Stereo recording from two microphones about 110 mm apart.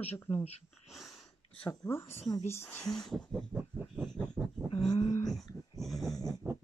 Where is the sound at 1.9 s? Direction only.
25° left (ahead or behind).